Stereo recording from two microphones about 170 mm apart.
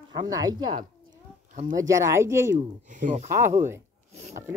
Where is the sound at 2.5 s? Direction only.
45° right (ahead or behind).